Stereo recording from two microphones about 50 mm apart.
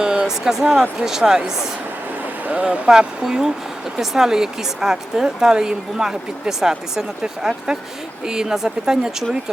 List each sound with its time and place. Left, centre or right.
0.0 s a sound: centre
0.6 s speech: centre
2.5 s speech: right